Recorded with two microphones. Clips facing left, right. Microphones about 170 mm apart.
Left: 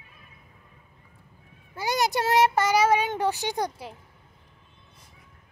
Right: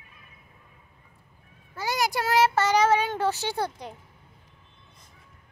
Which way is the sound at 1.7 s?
20° left (ahead or behind).